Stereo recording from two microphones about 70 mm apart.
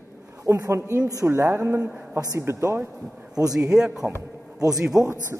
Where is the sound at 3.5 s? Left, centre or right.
Centre.